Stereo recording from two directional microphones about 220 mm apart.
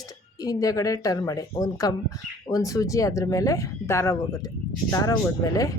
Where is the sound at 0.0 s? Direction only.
15° left (ahead or behind).